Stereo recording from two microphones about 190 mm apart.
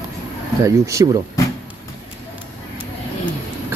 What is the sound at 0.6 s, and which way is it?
Speech, 15° right (ahead or behind).